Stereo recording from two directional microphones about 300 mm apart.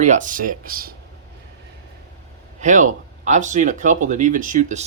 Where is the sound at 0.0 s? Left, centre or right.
Right.